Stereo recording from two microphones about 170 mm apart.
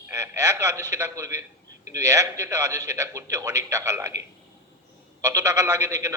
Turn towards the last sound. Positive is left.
turn(degrees=-20)  # may be behind; listen again after turning